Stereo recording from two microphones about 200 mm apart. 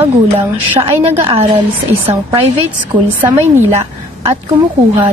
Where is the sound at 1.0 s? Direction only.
30° right (ahead or behind).